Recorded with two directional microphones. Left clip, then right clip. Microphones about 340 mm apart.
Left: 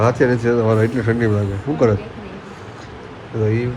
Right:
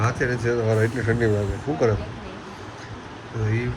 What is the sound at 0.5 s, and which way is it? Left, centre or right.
Speech, left.